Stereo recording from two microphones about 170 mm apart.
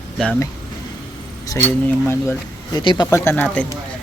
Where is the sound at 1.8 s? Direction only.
15° left (ahead or behind).